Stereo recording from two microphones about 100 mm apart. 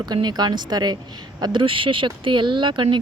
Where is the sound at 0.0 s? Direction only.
45° right (ahead or behind).